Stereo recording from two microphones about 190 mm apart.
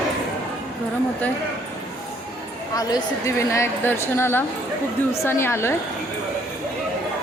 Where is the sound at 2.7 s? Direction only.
20° left (ahead or behind).